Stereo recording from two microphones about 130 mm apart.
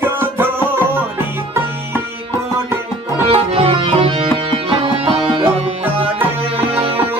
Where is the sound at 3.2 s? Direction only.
50° right (ahead or behind).